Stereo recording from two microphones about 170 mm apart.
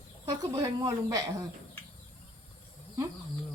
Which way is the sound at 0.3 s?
20° right (ahead or behind).